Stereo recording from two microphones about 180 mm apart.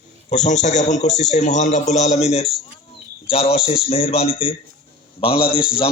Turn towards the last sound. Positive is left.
turn(degrees=30)  # may be behind; listen again after turning